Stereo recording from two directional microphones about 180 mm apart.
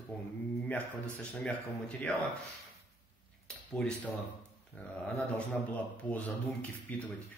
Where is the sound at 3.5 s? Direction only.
5° left (ahead or behind).